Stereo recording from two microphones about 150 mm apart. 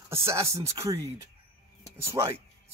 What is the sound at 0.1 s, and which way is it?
Speech, 20° right (ahead or behind).